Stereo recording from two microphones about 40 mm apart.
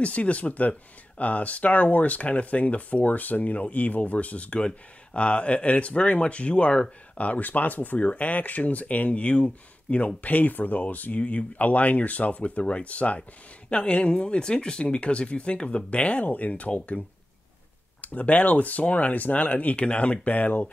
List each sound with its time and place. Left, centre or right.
0.0 s speech: left
7.2 s speech: left
18.0 s speech: left